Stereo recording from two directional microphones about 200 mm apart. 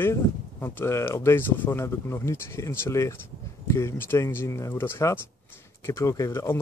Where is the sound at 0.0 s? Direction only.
10° left (ahead or behind).